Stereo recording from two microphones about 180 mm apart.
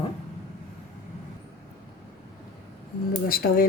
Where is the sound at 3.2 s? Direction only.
55° left (ahead or behind).